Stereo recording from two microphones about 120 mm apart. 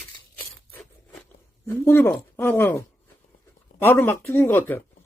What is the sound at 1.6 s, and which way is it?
Speech, 20° left (ahead or behind).